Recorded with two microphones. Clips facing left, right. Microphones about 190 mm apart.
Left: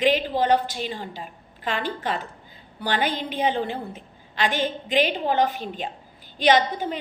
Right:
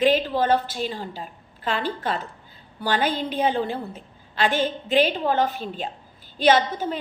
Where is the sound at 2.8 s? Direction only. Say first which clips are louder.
Right 2 dB; 45° right (ahead or behind).